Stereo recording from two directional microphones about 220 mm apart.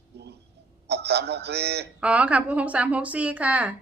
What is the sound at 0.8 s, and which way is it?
A man's voice, 50° right (ahead or behind).